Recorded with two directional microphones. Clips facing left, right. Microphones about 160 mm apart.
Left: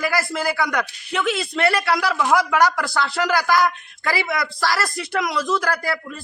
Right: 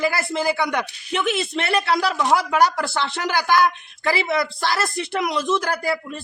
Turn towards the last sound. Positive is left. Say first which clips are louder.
# right 2 dB
turn(degrees=-25)  # may be behind; listen again after turning